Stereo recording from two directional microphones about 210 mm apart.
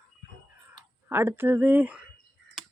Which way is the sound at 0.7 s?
10° right (ahead or behind).